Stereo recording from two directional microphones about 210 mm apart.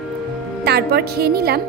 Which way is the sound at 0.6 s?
50° right (ahead or behind).